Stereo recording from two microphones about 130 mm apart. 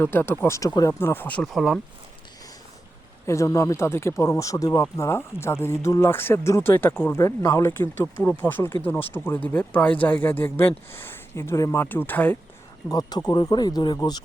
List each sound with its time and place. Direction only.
0.0 s speech: 15° left (ahead or behind); by 1.8 s centre (ahead or behind)
3.2 s speech: 25° left (ahead or behind)
12.9 s speech: 30° left (ahead or behind)